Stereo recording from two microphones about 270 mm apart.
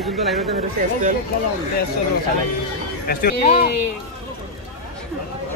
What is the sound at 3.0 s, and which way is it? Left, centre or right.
Speech, left.